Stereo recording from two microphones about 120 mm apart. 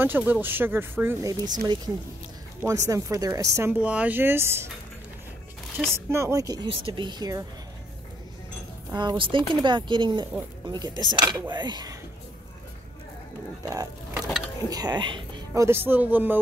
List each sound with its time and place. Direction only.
0.0 s speech: 15° right (ahead or behind)
1.4 s speech: 35° right (ahead or behind)
2.6 s speech: 25° right (ahead or behind)
3.8 s speech: 10° right (ahead or behind)
5.9 s speech: 20° right (ahead or behind)
6.7 s speech: 45° right (ahead or behind)
8.9 s speech: 40° right (ahead or behind)
13.7 s a sound: 30° right (ahead or behind)
14.7 s speech: 35° right (ahead or behind)
15.5 s speech: 20° right (ahead or behind)